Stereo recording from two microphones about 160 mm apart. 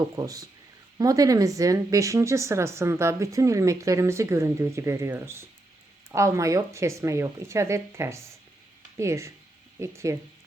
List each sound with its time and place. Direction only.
0.2 s a woman's voice: 20° right (ahead or behind)